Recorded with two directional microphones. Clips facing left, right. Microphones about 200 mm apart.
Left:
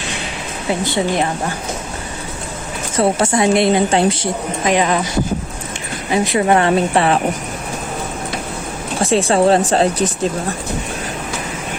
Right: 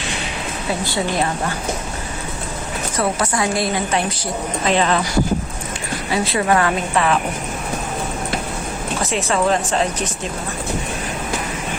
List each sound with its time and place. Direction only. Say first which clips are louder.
0.7 s a woman's voice: left 4 dB; 20° left (ahead or behind)
2.9 s a woman's voice: left 6 dB; 25° left (ahead or behind)
4.6 s speech: left 2 dB; 15° left (ahead or behind)
6.1 s a woman's voice: left 4 dB; 20° left (ahead or behind)
9.0 s speech: left 7 dB; 30° left (ahead or behind)